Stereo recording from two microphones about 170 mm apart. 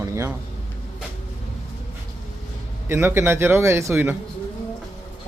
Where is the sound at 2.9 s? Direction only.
15° right (ahead or behind).